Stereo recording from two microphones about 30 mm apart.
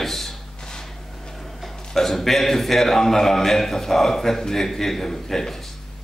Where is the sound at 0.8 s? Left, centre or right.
Centre.